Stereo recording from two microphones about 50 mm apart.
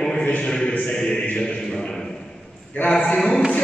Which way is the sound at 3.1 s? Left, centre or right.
Centre.